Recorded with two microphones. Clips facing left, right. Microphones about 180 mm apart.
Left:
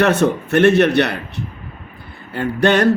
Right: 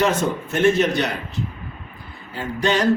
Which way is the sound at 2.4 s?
60° left (ahead or behind).